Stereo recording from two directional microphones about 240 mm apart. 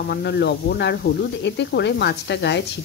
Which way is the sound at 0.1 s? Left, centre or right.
Left.